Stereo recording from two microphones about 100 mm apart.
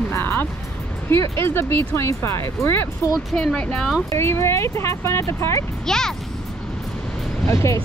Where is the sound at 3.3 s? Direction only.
5° left (ahead or behind).